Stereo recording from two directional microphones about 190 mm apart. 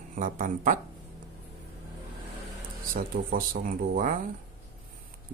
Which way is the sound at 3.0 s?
50° right (ahead or behind).